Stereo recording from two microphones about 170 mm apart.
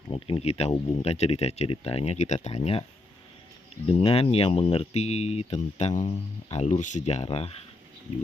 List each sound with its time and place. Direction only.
0.1 s speech: 35° left (ahead or behind)
3.8 s speech: 35° left (ahead or behind)